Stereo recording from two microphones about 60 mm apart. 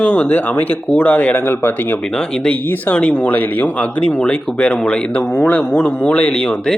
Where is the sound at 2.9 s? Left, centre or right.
Left.